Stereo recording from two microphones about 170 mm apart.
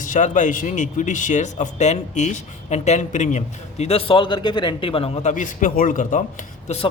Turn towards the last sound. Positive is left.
turn(degrees=35)  # may be behind; listen again after turning